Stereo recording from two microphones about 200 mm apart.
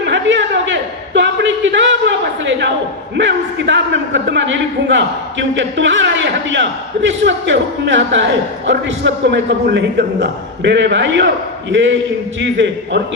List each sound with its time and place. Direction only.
0.0 s a sound: 65° right (ahead or behind)
3.2 s a man's voice: 65° right (ahead or behind)
12.4 s a man's voice: 60° right (ahead or behind)